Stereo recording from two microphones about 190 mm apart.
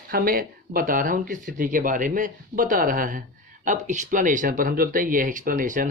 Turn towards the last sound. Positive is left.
turn(degrees=-45)  # may be behind; listen again after turning